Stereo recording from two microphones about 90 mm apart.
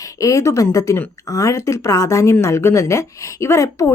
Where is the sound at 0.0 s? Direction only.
35° left (ahead or behind).